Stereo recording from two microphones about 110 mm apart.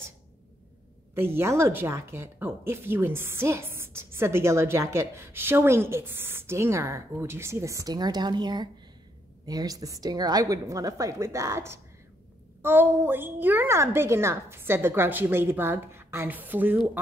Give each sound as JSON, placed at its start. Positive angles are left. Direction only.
{"t": 1.1, "sound": "a woman's voice", "side_deg": -20}